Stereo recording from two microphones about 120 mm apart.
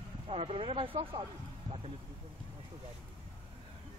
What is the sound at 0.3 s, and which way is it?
Speech, 55° right (ahead or behind).